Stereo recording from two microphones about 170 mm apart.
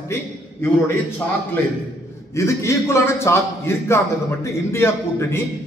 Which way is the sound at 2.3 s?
15° left (ahead or behind).